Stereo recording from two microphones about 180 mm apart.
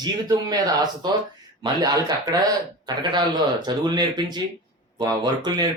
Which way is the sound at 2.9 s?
25° right (ahead or behind).